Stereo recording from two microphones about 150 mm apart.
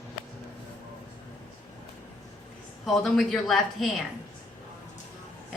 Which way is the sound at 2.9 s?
Centre (ahead or behind).